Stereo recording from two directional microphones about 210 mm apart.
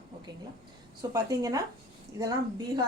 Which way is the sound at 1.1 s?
15° right (ahead or behind).